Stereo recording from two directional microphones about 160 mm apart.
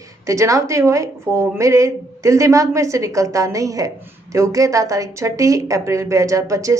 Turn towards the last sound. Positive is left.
turn(degrees=-20)  # may be behind; listen again after turning